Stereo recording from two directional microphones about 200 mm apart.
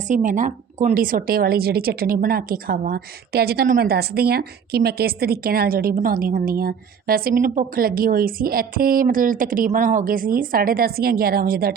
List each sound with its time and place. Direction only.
0.1 s a woman's voice: 40° right (ahead or behind)